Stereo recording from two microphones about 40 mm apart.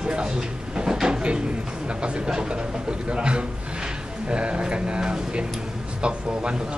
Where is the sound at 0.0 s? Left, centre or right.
Centre.